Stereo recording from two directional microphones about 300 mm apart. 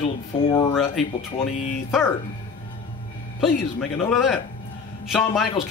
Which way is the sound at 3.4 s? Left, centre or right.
Centre.